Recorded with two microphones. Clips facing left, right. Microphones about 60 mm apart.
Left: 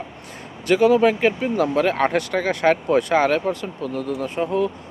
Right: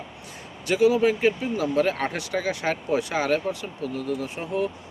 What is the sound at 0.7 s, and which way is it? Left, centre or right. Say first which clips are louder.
Speech: left 4 dB; left.